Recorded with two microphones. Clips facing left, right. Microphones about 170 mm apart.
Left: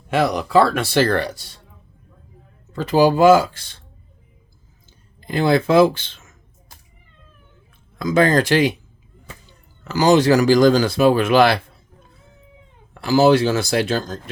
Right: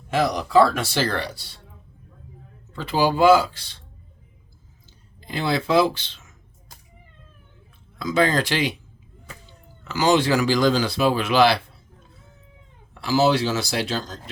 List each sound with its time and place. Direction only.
0.1 s speech: 60° left (ahead or behind)
2.7 s speech: 45° left (ahead or behind)
4.9 s speech: 50° left (ahead or behind)
7.9 s speech: 50° left (ahead or behind)
9.8 s speech: 40° left (ahead or behind)
12.9 s speech: 50° left (ahead or behind)